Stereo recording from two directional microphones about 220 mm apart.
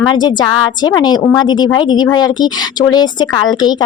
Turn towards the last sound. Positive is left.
turn(degrees=20)  # may be behind; listen again after turning